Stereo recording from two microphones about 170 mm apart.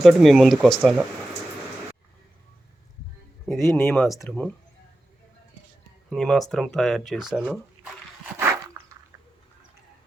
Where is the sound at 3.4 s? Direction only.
Centre (ahead or behind).